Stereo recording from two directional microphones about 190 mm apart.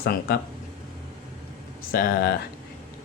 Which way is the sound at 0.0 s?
55° left (ahead or behind).